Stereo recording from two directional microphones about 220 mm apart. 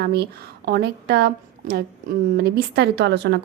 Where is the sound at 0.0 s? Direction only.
50° right (ahead or behind).